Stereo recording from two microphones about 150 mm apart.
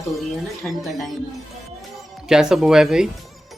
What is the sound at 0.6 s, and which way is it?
Speech, 5° left (ahead or behind).